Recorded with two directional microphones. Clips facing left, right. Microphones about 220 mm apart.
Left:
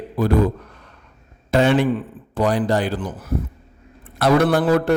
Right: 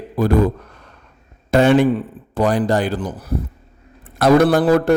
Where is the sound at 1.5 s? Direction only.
45° right (ahead or behind).